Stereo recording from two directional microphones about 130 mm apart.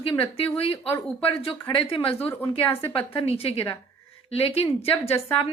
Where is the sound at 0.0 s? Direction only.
45° left (ahead or behind).